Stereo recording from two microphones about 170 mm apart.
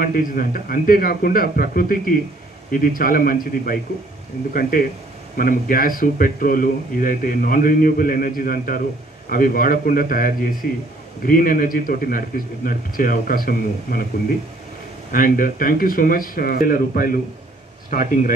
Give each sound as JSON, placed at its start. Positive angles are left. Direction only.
{"t": 0.0, "sound": "speech", "side_deg": 55}
{"t": 15.1, "sound": "speech", "side_deg": 55}